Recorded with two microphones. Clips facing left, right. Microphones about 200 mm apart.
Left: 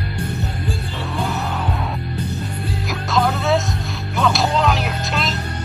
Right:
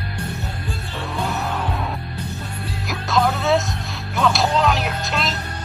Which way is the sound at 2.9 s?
Centre (ahead or behind).